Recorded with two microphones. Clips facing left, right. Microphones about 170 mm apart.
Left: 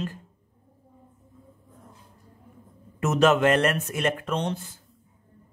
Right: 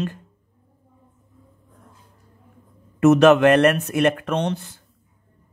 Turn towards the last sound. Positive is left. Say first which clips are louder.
# right 5 dB
turn(degrees=-70)  # may be behind; listen again after turning